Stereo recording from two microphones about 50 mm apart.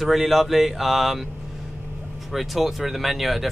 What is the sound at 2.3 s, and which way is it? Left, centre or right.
Speech, centre.